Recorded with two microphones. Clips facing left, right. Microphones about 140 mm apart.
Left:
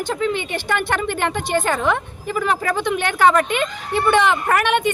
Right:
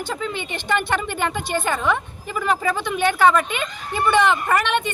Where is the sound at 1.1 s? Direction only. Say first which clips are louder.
Left 2 dB; 10° right (ahead or behind).